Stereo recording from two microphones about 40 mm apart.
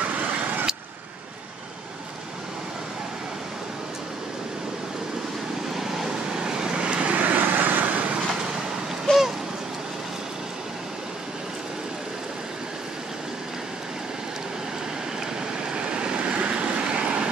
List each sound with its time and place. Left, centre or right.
0.0 s vehicle: right
5.8 s vehicle: centre; by 8.1 s right
9.1 s a sound: centre
15.7 s vehicle: right